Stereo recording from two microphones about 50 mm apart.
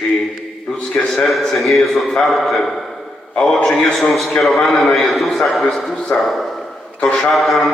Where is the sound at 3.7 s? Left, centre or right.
Centre.